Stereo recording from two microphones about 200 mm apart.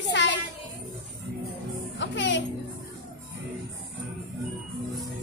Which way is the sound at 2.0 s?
65° left (ahead or behind).